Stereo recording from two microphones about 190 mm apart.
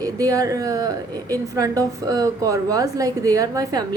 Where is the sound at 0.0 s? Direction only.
20° right (ahead or behind).